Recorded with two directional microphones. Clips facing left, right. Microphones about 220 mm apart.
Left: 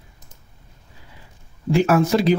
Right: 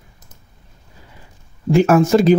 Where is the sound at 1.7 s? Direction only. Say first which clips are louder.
Right 4 dB; 45° right (ahead or behind).